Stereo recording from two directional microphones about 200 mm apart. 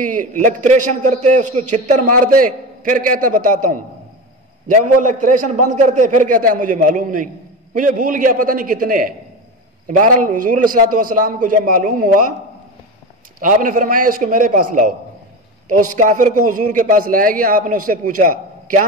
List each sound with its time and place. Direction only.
0.0 s a man's voice: 40° right (ahead or behind)
13.4 s a man's voice: 40° right (ahead or behind)